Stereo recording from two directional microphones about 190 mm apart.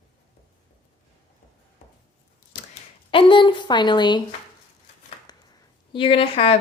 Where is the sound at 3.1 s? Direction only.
25° left (ahead or behind).